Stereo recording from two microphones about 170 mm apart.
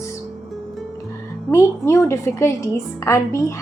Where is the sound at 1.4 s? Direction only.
15° left (ahead or behind).